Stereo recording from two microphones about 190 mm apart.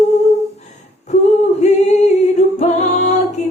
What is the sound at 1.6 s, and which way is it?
A capella, 35° left (ahead or behind).